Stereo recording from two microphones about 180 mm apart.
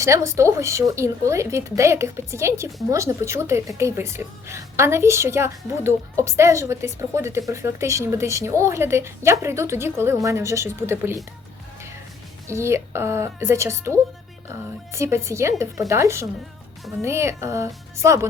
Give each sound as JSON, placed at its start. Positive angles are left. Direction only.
{"t": 0.0, "sound": "a woman's voice", "side_deg": -15}
{"t": 12.5, "sound": "a woman's voice", "side_deg": -15}